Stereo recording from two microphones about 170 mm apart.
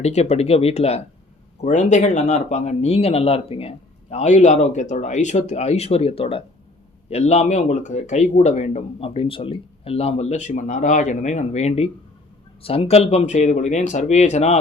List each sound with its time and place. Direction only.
0.0 s speech: 40° left (ahead or behind)